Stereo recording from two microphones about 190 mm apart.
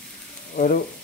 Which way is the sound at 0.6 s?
50° left (ahead or behind).